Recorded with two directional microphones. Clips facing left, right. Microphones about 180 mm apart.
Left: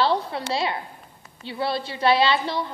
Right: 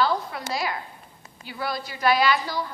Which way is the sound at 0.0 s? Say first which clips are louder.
Left 2 dB; 30° left (ahead or behind).